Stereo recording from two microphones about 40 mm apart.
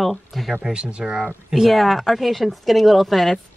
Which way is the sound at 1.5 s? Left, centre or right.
Centre.